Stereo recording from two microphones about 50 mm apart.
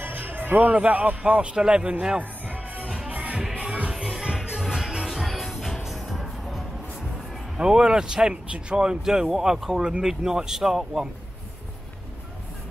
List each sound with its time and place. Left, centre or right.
0.0 s music: right
0.7 s a man's voice: right
3.1 s music: right
3.9 s music: centre
7.5 s speech: centre